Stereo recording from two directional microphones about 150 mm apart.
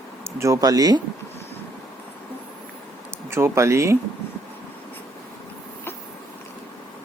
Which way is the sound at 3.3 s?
20° right (ahead or behind).